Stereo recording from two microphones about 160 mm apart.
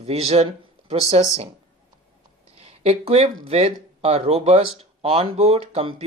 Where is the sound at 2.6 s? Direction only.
40° right (ahead or behind).